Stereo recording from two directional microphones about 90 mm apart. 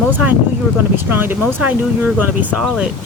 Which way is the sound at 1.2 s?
20° right (ahead or behind).